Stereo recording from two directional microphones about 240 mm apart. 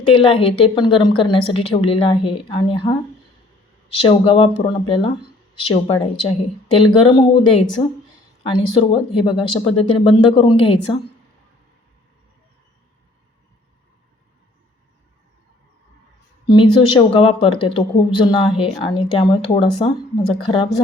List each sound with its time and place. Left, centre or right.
0.2 s a woman's voice: left
4.0 s a woman's voice: left
16.5 s a woman's voice: centre